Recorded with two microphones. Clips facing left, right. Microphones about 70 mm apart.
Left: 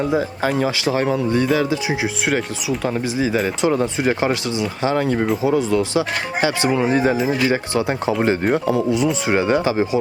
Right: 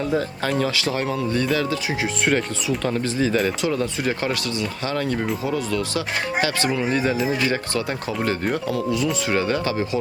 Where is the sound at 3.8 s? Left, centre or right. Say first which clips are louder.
Left 5 dB; left.